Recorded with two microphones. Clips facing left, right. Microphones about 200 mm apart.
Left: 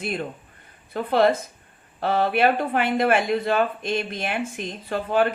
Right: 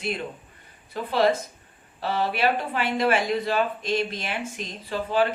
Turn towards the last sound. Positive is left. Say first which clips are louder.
# left 2 dB
turn(degrees=55)  # may be behind; listen again after turning